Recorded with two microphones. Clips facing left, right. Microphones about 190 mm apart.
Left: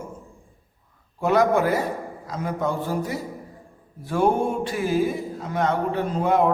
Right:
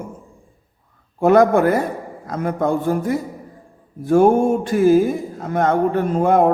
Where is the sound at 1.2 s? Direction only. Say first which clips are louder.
Right 6 dB; 55° right (ahead or behind).